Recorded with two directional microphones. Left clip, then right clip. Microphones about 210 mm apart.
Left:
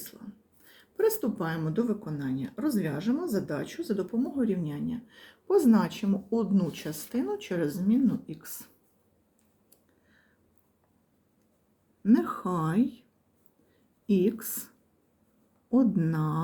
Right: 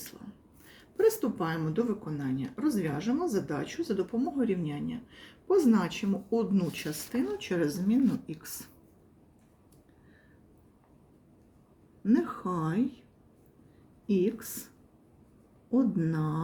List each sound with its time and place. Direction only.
0.7 s speech: 10° left (ahead or behind)
12.0 s a woman's voice: 20° left (ahead or behind)
14.1 s a woman's voice: 20° left (ahead or behind)
15.7 s a woman's voice: 25° left (ahead or behind)